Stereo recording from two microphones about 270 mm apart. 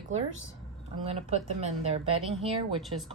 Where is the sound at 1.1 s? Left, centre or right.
Right.